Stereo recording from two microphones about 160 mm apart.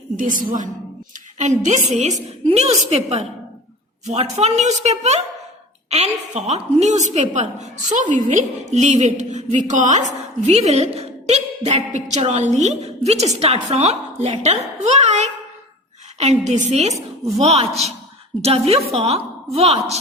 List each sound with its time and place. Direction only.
0.2 s a woman's voice: 55° right (ahead or behind); by 20.0 s 40° right (ahead or behind)